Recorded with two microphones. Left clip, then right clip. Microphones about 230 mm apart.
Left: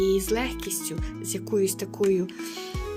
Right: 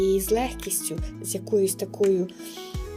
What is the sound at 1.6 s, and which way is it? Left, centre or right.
Speech, left.